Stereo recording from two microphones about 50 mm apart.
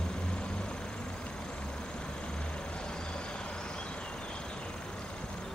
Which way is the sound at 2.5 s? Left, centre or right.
Centre.